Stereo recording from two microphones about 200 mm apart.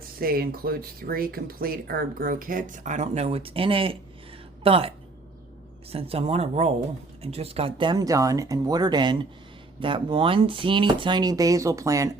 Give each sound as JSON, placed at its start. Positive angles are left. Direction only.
{"t": 0.2, "sound": "speech", "side_deg": -50}
{"t": 5.9, "sound": "speech", "side_deg": -30}